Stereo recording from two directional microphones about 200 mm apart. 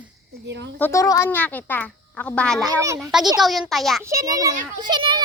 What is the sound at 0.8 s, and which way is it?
A woman's voice, 15° left (ahead or behind).